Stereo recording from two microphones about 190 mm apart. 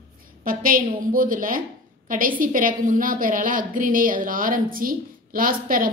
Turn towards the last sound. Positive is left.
turn(degrees=-50)  # may be behind; listen again after turning